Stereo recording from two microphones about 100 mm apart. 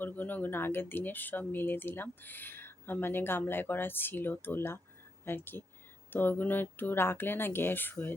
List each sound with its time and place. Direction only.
0.0 s speech: 15° left (ahead or behind)